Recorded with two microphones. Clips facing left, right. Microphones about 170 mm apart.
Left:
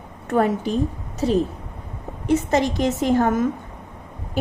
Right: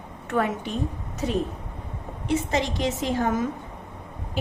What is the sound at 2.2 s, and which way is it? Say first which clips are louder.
A woman's voice: left 6 dB; 45° left (ahead or behind).